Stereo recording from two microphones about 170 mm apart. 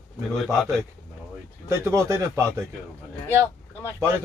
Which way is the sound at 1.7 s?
15° right (ahead or behind).